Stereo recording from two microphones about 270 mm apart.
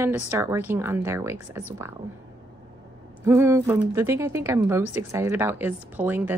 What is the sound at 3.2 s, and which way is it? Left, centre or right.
A woman's voice, centre.